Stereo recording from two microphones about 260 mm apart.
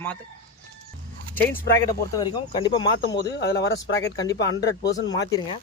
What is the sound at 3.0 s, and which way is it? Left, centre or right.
Speech, left.